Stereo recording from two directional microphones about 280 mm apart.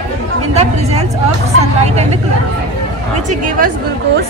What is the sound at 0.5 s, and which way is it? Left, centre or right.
Speech, right.